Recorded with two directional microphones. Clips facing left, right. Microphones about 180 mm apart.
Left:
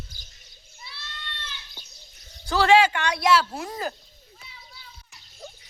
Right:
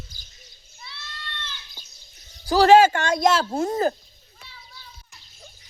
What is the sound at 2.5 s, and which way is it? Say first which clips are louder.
Speech: right 5 dB; 40° right (ahead or behind).